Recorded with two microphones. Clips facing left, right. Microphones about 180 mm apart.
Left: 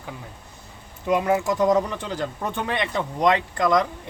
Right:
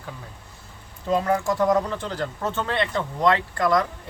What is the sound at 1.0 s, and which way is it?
Speech, 15° left (ahead or behind).